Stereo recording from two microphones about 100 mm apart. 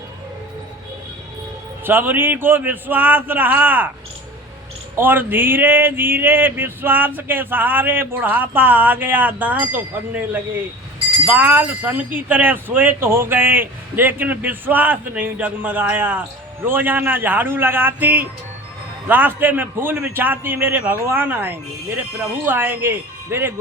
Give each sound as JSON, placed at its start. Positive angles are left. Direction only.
{"t": 1.8, "sound": "speech", "side_deg": -20}
{"t": 4.9, "sound": "speech", "side_deg": -20}